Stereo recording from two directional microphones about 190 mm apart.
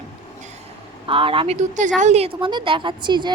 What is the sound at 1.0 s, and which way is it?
Child singing, 30° right (ahead or behind).